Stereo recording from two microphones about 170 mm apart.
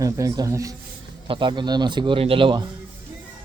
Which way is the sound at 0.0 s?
20° right (ahead or behind).